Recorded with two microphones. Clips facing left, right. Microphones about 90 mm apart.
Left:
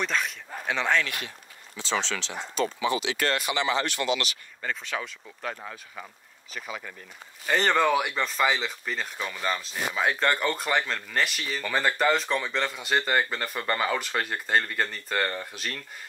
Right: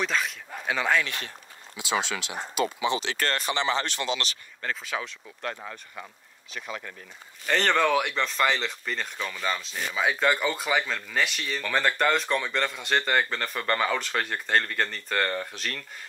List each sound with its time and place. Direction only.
0.0 s speech: centre (ahead or behind)
3.0 s speech: 40° right (ahead or behind)
4.6 s speech: centre (ahead or behind)